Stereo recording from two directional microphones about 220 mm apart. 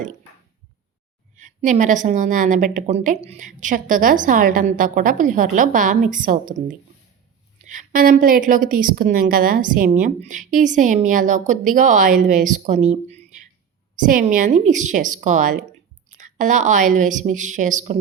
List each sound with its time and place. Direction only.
1.4 s a woman's voice: 35° right (ahead or behind)
7.7 s a woman's voice: 35° right (ahead or behind)